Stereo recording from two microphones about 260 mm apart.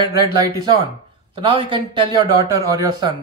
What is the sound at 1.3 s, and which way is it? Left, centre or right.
Speech, centre.